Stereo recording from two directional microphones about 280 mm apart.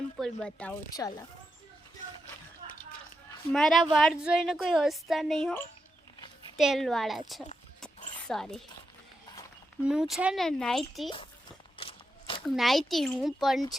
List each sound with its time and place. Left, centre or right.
0.2 s speech: centre
3.5 s speech: centre
8.3 s speech: centre
9.8 s speech: centre
11.8 s a sound: centre
12.5 s speech: centre